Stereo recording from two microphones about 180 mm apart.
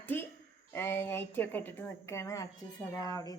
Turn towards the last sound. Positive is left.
turn(degrees=20)  # may be behind; listen again after turning